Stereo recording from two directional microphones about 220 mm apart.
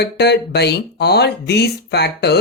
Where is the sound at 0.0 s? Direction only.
50° left (ahead or behind).